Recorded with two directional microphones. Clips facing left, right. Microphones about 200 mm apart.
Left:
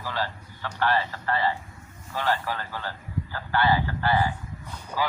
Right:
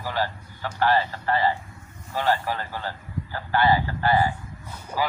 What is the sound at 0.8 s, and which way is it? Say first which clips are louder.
Speech: right 3 dB; 30° right (ahead or behind).